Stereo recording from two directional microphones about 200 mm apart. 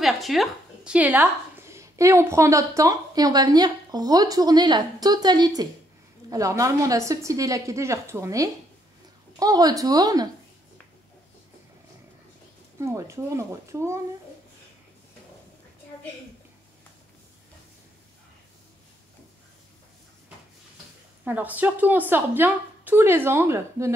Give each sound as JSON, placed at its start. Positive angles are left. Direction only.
{"t": 0.0, "sound": "a woman's voice", "side_deg": 0}
{"t": 12.7, "sound": "a woman's voice", "side_deg": -15}
{"t": 21.2, "sound": "a woman's voice", "side_deg": -10}